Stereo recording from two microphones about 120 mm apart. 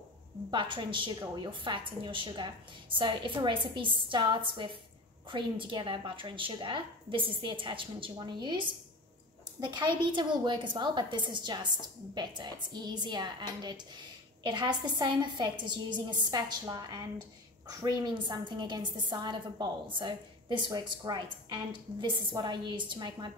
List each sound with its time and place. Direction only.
0.5 s a woman's voice: 45° right (ahead or behind)